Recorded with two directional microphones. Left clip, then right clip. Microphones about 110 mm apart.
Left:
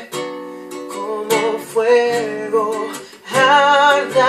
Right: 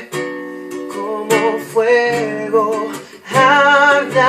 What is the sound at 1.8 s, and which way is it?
Music, 15° left (ahead or behind).